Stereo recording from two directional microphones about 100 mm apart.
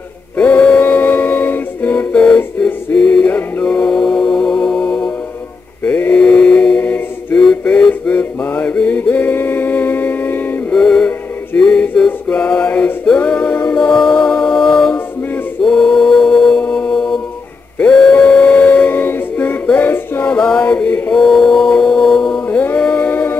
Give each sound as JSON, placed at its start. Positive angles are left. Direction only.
{"t": 0.4, "sound": "music", "side_deg": 15}
{"t": 5.9, "sound": "mantra", "side_deg": 15}
{"t": 10.7, "sound": "male singing", "side_deg": 10}
{"t": 15.6, "sound": "mantra", "side_deg": 5}
{"t": 17.7, "sound": "a sound", "side_deg": 10}
{"t": 18.1, "sound": "music", "side_deg": 10}
{"t": 20.3, "sound": "mantra", "side_deg": 10}
{"t": 21.1, "sound": "mantra", "side_deg": 5}
{"t": 22.5, "sound": "a sound", "side_deg": 15}